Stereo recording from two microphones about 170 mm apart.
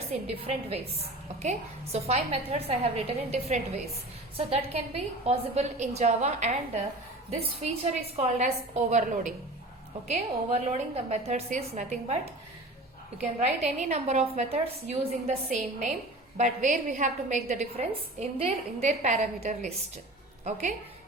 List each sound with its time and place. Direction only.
0.1 s a woman's voice: 35° right (ahead or behind)
10.1 s a woman's voice: 40° right (ahead or behind)
16.4 s a woman's voice: 45° right (ahead or behind)